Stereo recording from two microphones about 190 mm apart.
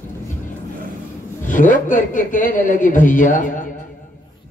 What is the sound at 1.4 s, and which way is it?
A man's voice, 45° left (ahead or behind).